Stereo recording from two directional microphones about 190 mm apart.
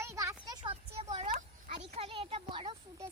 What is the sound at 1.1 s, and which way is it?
A child's voice, 35° right (ahead or behind).